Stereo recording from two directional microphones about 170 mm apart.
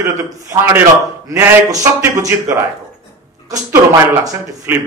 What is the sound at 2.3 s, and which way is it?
Speech, 15° right (ahead or behind).